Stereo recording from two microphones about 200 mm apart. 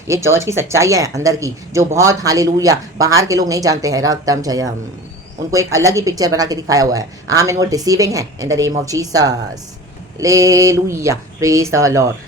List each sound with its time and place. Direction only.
0.1 s speech: 15° right (ahead or behind)